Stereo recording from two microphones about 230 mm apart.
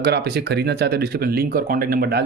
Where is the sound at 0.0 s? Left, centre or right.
Right.